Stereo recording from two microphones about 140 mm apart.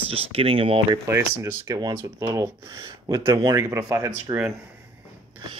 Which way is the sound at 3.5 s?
20° right (ahead or behind).